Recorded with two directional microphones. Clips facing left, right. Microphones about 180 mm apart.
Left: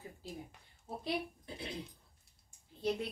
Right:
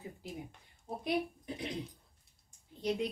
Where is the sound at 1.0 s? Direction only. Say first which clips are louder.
Right 4 dB; 15° right (ahead or behind).